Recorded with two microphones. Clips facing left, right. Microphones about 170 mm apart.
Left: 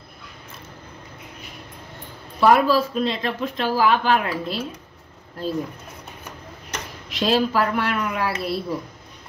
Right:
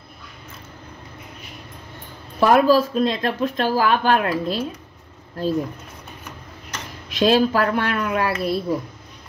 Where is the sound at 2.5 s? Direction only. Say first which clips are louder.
Right 6 dB; 45° right (ahead or behind).